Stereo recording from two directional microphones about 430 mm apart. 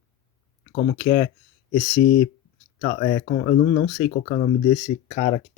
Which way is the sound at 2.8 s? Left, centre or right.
Centre.